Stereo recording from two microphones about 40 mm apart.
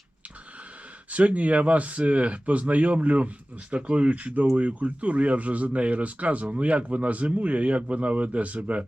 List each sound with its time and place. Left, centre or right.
1.1 s speech: right